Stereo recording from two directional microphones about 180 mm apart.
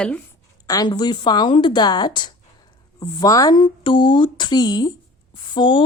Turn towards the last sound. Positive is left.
turn(degrees=25)  # may be behind; listen again after turning